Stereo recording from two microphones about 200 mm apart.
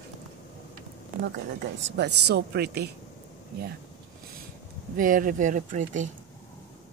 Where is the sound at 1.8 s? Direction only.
60° right (ahead or behind).